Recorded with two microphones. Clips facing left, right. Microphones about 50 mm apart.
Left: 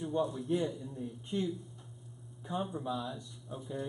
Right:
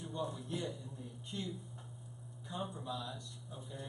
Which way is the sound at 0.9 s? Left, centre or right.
Centre.